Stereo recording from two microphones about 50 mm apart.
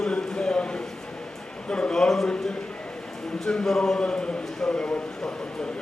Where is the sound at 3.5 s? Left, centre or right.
Centre.